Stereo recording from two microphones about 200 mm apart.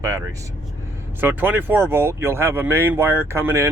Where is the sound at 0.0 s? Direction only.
15° right (ahead or behind).